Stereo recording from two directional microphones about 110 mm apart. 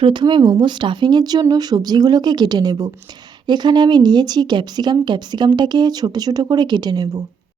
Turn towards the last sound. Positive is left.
turn(degrees=-35)  # may be behind; listen again after turning